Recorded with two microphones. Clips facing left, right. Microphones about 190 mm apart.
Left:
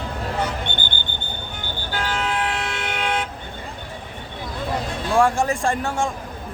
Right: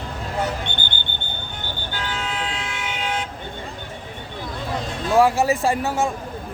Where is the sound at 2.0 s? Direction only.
65° left (ahead or behind).